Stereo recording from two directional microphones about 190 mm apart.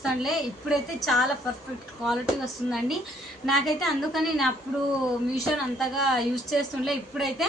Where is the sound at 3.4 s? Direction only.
Centre (ahead or behind).